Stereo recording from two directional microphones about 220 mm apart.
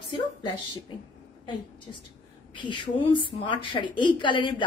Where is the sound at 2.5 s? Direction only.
20° left (ahead or behind).